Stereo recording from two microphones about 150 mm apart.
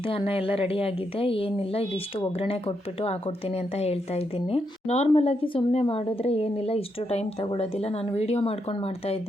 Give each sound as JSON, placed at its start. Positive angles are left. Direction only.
{"t": 0.0, "sound": "speech", "side_deg": 40}